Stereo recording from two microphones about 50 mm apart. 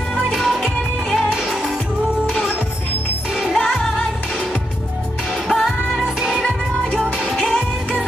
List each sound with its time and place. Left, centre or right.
0.3 s music: centre
3.5 s music: centre
5.5 s music: centre
6.4 s music: left
7.2 s music: centre